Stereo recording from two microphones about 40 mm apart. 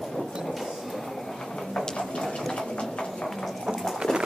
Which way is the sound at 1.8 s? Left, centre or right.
Centre.